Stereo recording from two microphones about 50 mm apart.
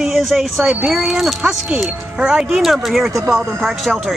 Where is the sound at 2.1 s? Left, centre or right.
Centre.